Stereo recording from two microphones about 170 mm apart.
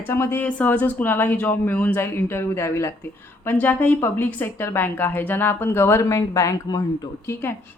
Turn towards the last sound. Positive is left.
turn(degrees=20)  # may be behind; listen again after turning